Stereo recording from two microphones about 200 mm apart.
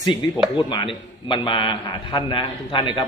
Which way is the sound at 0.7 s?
25° left (ahead or behind).